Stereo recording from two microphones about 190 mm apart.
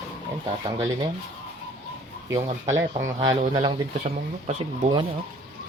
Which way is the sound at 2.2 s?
15° right (ahead or behind).